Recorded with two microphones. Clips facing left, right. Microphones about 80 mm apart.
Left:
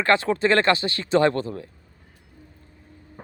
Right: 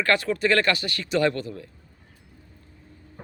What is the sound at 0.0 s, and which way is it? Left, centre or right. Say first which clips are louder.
Speech: left 3 dB; left.